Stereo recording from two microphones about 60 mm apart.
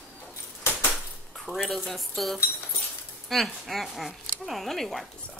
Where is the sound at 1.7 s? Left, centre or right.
Centre.